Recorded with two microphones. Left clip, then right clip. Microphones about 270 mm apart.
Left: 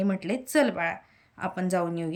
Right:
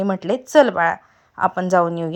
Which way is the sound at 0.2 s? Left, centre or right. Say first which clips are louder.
Right 11 dB; right.